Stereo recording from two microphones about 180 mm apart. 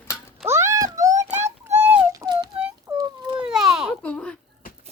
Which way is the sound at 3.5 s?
5° right (ahead or behind).